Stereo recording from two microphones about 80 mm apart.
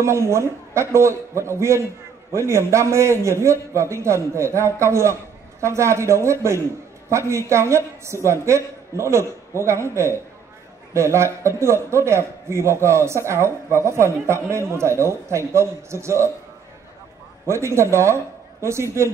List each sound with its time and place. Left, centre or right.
0.0 s a man's voice: right
17.5 s a man's voice: right